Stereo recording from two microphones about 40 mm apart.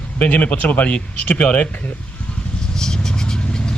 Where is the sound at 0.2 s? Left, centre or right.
Left.